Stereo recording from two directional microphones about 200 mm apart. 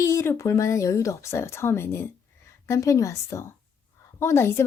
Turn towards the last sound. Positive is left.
turn(degrees=15)  # may be behind; listen again after turning